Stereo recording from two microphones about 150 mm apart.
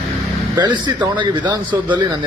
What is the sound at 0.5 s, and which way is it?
A man's voice, 30° right (ahead or behind).